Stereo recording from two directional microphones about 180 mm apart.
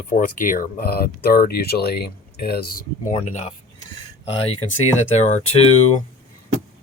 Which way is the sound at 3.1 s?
40° left (ahead or behind).